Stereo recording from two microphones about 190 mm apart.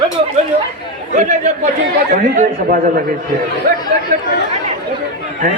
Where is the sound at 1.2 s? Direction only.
40° right (ahead or behind).